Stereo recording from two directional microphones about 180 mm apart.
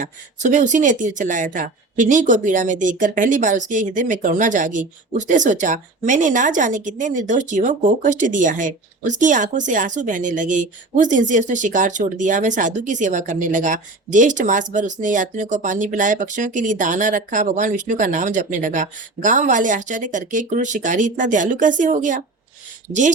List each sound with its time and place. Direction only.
0.0 s speech: 45° right (ahead or behind)